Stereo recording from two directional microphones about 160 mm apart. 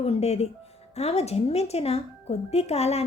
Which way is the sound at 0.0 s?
40° left (ahead or behind).